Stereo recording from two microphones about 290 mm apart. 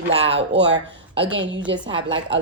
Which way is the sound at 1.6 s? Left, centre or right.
Centre.